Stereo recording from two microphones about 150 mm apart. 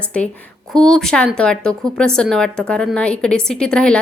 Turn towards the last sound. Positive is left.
turn(degrees=5)  # may be behind; listen again after turning